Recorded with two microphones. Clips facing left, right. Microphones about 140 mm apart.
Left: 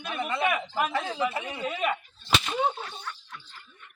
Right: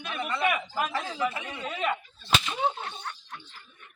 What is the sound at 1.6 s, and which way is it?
Speech, 5° left (ahead or behind).